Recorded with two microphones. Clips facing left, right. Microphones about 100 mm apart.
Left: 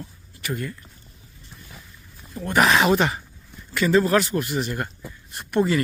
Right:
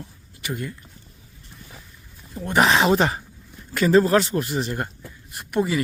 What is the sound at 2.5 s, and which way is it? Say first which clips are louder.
Speech: even; 25° right (ahead or behind).